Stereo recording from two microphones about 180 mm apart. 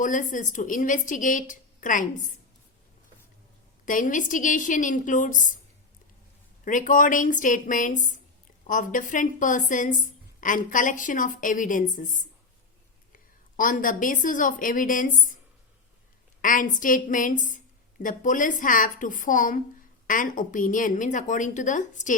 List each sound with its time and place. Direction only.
0.0 s a woman's voice: 45° left (ahead or behind)
3.8 s a woman's voice: 45° left (ahead or behind)
6.7 s a woman's voice: 45° left (ahead or behind)
16.4 s a woman's voice: 50° left (ahead or behind)